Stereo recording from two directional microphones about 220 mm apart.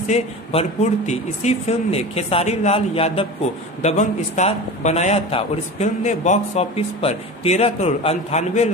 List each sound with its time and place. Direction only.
0.1 s a man's voice: 30° left (ahead or behind)